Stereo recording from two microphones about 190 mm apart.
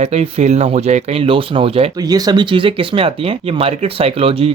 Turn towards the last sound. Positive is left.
turn(degrees=-30)  # may be behind; listen again after turning